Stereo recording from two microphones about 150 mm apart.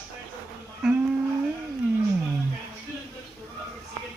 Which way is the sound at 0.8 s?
5° right (ahead or behind).